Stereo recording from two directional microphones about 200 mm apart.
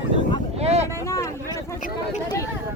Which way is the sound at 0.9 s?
15° left (ahead or behind).